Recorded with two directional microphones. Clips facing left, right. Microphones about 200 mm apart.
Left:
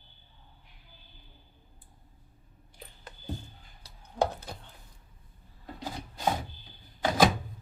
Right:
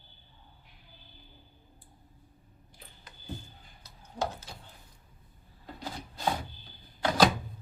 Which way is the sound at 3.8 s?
60° left (ahead or behind).